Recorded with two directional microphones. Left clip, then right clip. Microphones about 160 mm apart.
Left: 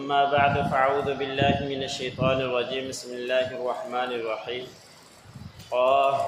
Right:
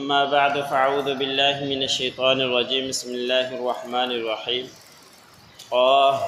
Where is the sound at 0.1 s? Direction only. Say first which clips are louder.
Right 2 dB; 35° right (ahead or behind).